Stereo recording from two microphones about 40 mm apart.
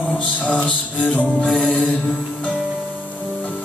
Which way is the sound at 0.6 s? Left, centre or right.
Left.